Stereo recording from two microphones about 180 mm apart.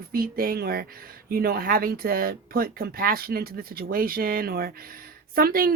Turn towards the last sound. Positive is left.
turn(degrees=-55)  # may be behind; listen again after turning